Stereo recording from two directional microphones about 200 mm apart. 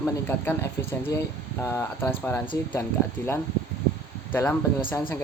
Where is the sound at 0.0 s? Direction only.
10° left (ahead or behind).